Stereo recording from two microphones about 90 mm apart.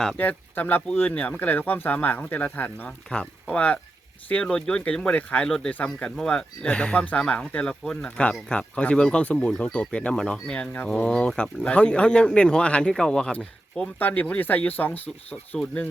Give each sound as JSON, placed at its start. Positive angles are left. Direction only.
{"t": 0.2, "sound": "speech", "side_deg": 20}